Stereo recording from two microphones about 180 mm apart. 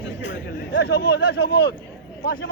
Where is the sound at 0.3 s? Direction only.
75° left (ahead or behind).